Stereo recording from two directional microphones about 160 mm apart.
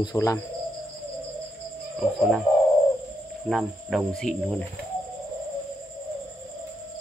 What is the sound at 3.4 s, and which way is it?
Cricket, centre (ahead or behind).